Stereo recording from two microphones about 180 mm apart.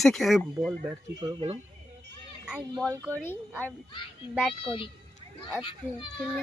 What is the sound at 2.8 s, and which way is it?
Speech, 10° right (ahead or behind).